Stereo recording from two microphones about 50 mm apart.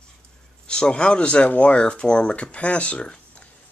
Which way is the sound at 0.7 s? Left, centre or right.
Centre.